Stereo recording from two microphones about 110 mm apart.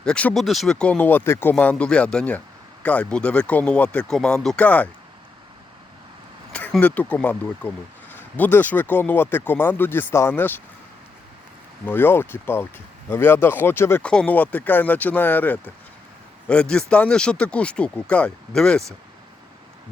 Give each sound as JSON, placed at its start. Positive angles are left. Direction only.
{"t": 0.0, "sound": "speech", "side_deg": 10}
{"t": 6.5, "sound": "speech", "side_deg": 15}
{"t": 11.9, "sound": "speech", "side_deg": 20}
{"t": 14.0, "sound": "speech", "side_deg": 10}